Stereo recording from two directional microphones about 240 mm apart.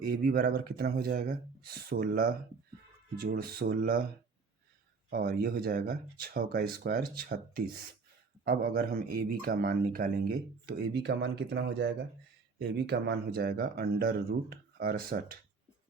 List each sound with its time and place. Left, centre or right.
0.0 s a man's voice: right
5.0 s a man's voice: right